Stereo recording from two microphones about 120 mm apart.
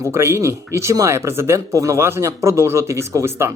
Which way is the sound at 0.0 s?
25° right (ahead or behind).